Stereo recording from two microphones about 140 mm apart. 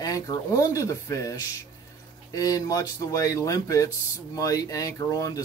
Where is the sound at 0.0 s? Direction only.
25° left (ahead or behind).